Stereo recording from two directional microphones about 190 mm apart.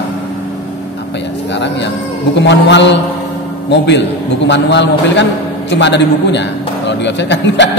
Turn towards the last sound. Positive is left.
turn(degrees=70)  # may be behind; listen again after turning